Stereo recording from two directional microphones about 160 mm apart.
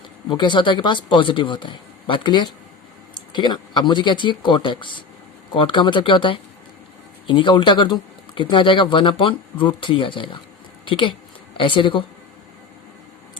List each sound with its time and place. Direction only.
0.3 s speech: 30° left (ahead or behind)